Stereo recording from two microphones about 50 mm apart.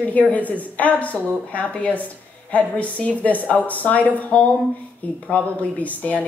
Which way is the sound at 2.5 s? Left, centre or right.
Left.